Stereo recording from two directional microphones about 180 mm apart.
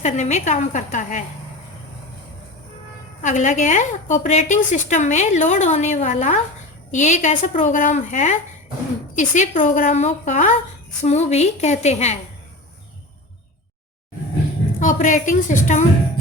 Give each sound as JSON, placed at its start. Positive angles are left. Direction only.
{"t": 0.0, "sound": "a woman's voice", "side_deg": 40}
{"t": 3.2, "sound": "a woman's voice", "side_deg": 40}
{"t": 14.8, "sound": "a woman's voice", "side_deg": 45}